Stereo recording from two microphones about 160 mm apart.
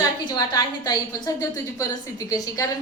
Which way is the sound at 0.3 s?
25° left (ahead or behind).